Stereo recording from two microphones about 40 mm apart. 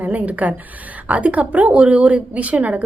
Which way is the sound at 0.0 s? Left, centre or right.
Right.